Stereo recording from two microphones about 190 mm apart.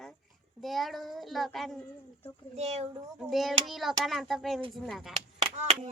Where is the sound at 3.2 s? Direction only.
Centre (ahead or behind).